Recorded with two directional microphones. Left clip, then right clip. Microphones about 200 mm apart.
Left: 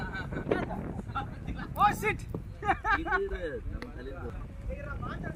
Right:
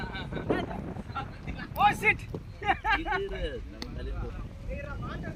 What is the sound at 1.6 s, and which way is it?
Speech, 45° left (ahead or behind).